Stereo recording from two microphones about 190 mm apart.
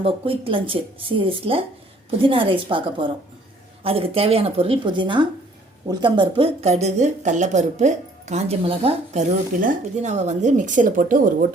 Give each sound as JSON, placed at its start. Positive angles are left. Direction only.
{"t": 0.0, "sound": "speech", "side_deg": -30}
{"t": 9.6, "sound": "speech", "side_deg": -40}